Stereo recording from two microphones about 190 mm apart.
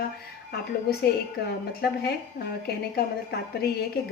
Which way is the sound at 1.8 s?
55° left (ahead or behind).